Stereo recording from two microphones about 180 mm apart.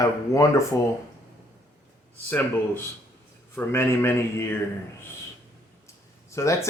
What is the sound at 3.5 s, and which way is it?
Speech, 15° left (ahead or behind).